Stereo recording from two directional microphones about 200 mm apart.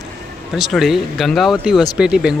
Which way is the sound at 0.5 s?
Centre (ahead or behind).